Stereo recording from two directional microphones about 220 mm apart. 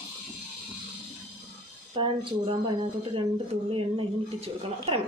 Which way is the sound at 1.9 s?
25° right (ahead or behind).